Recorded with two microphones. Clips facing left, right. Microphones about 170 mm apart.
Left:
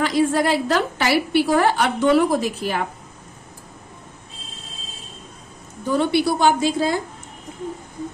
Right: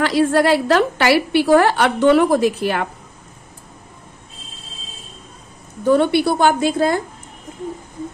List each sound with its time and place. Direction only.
0.0 s a woman's voice: 75° right (ahead or behind)
5.9 s a woman's voice: 60° right (ahead or behind)